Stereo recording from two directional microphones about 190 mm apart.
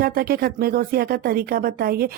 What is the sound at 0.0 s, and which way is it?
Speech, 50° right (ahead or behind).